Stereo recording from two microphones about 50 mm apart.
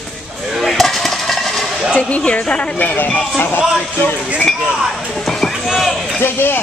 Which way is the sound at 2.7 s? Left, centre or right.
Left.